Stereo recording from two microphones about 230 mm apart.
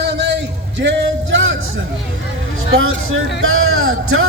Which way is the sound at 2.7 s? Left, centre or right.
Right.